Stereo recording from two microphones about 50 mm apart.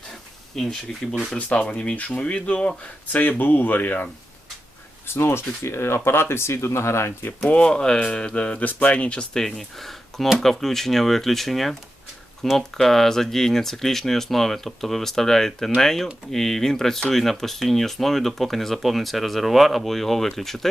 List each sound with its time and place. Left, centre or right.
0.5 s speech: centre
1.4 s speech: left
5.0 s speech: left
7.4 s speech: left
9.4 s speech: centre